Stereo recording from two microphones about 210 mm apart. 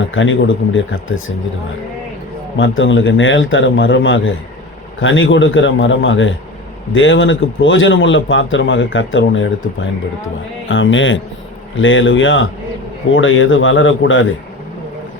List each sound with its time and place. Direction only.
0.1 s a man's voice: 65° left (ahead or behind)
2.6 s a man's voice: 65° left (ahead or behind)